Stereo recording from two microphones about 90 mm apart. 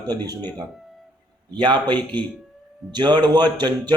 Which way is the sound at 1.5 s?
55° right (ahead or behind).